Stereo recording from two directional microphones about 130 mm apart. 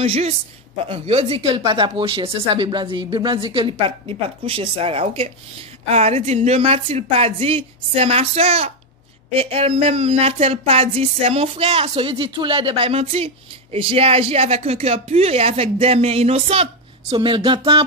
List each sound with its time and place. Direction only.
0.0 s speech: 50° right (ahead or behind)
5.9 s speech: 55° right (ahead or behind)
17.1 s a sound: 45° right (ahead or behind)